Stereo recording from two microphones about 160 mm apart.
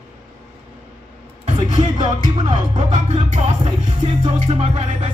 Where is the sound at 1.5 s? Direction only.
40° right (ahead or behind).